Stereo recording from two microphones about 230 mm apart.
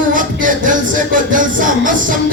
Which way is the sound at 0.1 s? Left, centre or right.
Right.